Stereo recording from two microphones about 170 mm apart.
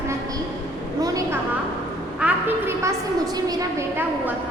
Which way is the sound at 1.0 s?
20° right (ahead or behind).